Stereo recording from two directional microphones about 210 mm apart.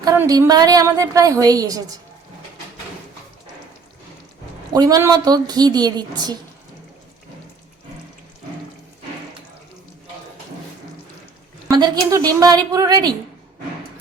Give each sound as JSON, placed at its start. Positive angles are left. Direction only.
{"t": 0.0, "sound": "a woman's voice", "side_deg": -15}
{"t": 4.7, "sound": "a woman's voice", "side_deg": -15}
{"t": 11.7, "sound": "a woman's voice", "side_deg": -20}